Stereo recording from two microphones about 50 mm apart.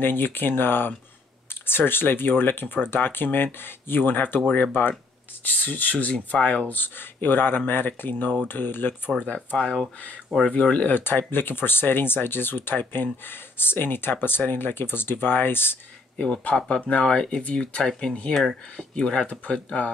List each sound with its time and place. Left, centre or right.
0.0 s speech: left
6.8 s speech: left
9.2 s speech: left
11.0 s speech: left
16.2 s speech: left